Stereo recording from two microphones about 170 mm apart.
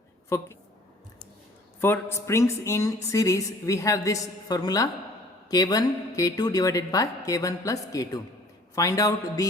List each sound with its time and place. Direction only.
0.3 s a woman's voice: 15° left (ahead or behind)
1.8 s speech: 15° left (ahead or behind)